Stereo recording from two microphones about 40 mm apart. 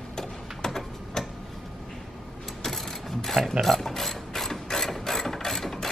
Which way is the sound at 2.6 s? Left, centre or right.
Centre.